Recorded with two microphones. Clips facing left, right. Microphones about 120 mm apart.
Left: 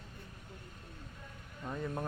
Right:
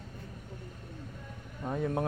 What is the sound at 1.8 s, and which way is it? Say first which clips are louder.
Speech: right 7 dB; 70° right (ahead or behind).